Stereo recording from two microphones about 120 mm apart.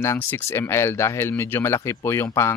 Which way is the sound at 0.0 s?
20° left (ahead or behind).